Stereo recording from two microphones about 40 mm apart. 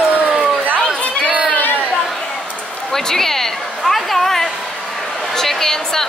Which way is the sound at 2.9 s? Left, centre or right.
Centre.